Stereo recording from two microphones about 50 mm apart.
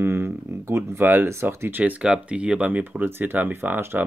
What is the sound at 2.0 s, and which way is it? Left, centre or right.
Speech, right.